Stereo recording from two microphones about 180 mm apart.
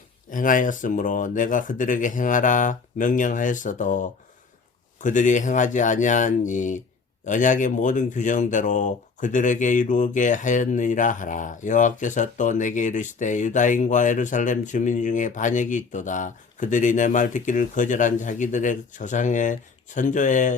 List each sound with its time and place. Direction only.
0.3 s speech: 50° left (ahead or behind)